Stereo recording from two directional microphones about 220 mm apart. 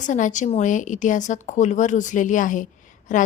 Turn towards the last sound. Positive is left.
turn(degrees=35)  # may be behind; listen again after turning